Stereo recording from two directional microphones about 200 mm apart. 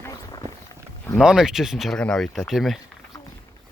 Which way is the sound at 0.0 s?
20° left (ahead or behind).